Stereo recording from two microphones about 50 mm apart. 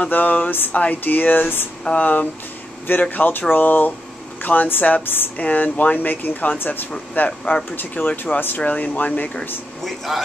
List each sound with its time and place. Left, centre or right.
0.1 s speech: left
5.4 s speech: left
7.2 s speech: left
7.7 s speech: left
9.8 s speech: centre